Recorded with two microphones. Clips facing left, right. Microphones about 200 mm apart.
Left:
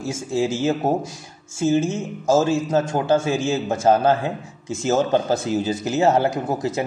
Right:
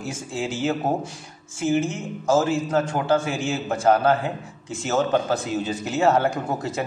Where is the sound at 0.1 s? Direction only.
25° left (ahead or behind).